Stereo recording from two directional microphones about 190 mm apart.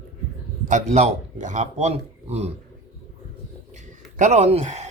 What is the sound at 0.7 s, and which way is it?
A man's voice, 40° right (ahead or behind).